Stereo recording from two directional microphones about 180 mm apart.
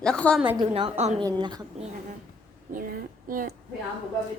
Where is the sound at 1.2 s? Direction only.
25° right (ahead or behind).